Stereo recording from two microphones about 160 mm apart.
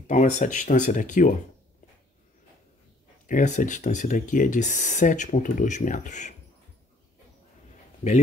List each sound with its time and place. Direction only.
0.0 s speech: 50° left (ahead or behind)
3.3 s speech: 55° left (ahead or behind)